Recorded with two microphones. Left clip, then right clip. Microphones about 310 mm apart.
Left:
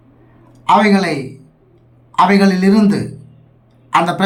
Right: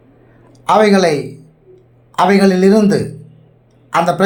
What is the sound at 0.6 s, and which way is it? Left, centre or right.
Speech, centre.